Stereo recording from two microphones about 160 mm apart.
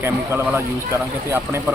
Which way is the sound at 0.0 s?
15° right (ahead or behind).